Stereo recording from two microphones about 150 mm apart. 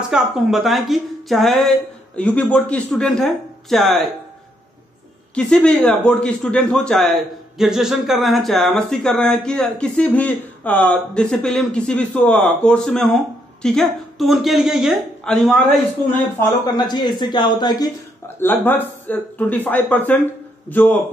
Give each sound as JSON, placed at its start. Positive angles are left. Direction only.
{"t": 0.1, "sound": "a man's voice", "side_deg": 0}
{"t": 5.3, "sound": "a man's voice", "side_deg": 5}
{"t": 16.7, "sound": "speech", "side_deg": 30}
{"t": 18.4, "sound": "speech", "side_deg": 15}